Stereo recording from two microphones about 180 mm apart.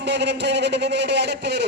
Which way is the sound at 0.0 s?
70° right (ahead or behind).